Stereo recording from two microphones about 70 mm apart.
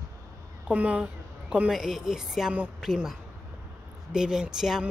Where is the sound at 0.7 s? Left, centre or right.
Right.